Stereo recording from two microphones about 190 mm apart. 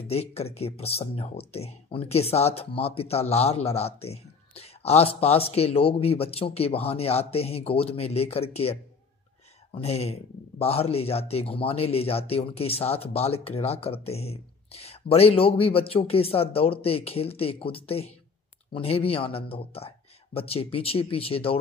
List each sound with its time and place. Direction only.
0.1 s speech: 35° left (ahead or behind)
9.8 s speech: 30° left (ahead or behind)